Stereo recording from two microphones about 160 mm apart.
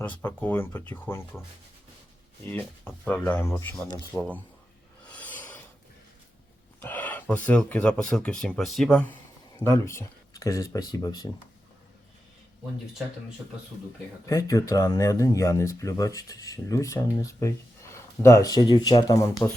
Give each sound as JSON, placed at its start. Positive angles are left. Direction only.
{"t": 0.2, "sound": "speech", "side_deg": 10}
{"t": 2.5, "sound": "speech", "side_deg": 10}
{"t": 5.0, "sound": "filing", "side_deg": 10}
{"t": 6.7, "sound": "speech", "side_deg": 10}
{"t": 9.6, "sound": "speech", "side_deg": 15}
{"t": 14.3, "sound": "speech", "side_deg": 20}